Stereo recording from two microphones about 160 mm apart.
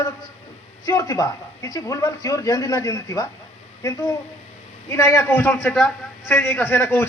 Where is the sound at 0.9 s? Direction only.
20° left (ahead or behind).